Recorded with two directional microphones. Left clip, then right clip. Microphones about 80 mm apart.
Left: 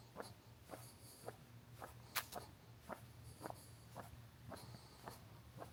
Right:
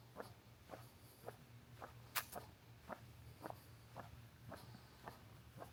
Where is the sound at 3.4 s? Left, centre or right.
Centre.